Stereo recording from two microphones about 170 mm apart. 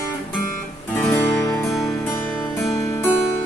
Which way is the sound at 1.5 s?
Centre (ahead or behind).